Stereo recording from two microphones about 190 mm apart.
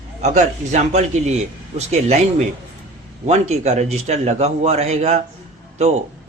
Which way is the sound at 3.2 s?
35° right (ahead or behind).